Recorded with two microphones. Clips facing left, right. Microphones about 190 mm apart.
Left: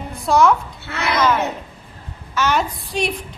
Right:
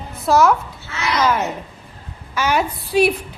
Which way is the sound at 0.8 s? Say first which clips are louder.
Left 2 dB; 60° left (ahead or behind).